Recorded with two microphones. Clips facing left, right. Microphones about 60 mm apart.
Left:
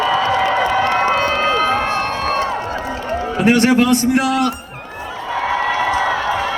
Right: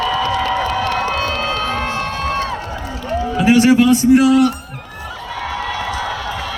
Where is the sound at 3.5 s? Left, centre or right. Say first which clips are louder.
Right 3 dB; left.